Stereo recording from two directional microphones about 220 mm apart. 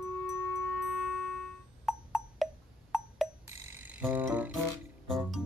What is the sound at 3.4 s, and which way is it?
Music, 10° right (ahead or behind).